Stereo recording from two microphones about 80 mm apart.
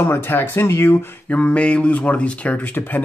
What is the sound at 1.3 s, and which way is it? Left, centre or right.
Speech, centre.